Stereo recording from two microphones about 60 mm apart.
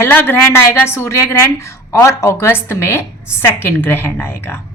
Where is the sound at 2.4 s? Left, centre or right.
Left.